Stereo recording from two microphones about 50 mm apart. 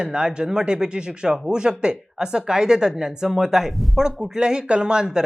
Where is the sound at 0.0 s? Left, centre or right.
Centre.